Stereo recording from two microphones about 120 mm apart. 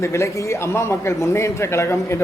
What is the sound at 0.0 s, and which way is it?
A man's voice, 25° left (ahead or behind).